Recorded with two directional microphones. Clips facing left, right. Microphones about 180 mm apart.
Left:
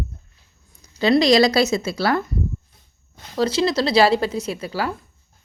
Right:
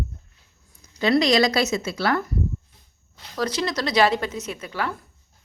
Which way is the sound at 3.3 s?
30° left (ahead or behind).